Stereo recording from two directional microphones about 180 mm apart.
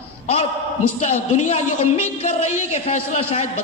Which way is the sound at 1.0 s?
40° left (ahead or behind).